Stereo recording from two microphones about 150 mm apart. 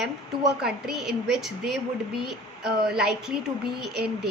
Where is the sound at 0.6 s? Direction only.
5° right (ahead or behind).